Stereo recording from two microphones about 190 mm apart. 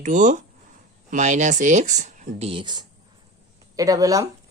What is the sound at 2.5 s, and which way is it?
Speech, 25° right (ahead or behind).